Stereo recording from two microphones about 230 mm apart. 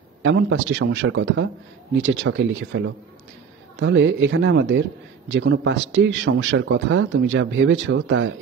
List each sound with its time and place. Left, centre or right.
0.2 s speech: right